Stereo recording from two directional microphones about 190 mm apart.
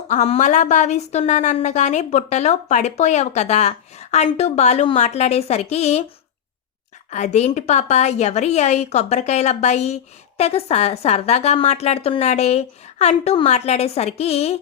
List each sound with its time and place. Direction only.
0.1 s a woman's voice: 35° left (ahead or behind)
7.1 s a woman's voice: 35° left (ahead or behind)